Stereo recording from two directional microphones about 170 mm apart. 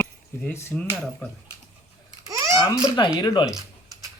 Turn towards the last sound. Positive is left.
turn(degrees=25)  # may be behind; listen again after turning